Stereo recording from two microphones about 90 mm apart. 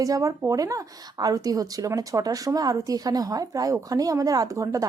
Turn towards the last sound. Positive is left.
turn(degrees=-35)  # may be behind; listen again after turning